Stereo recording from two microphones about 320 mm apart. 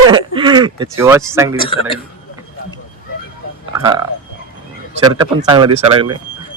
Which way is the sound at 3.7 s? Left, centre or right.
Centre.